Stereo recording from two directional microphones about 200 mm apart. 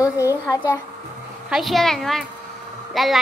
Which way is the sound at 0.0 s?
15° left (ahead or behind).